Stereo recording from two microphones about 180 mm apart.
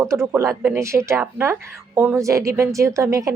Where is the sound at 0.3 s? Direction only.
15° right (ahead or behind).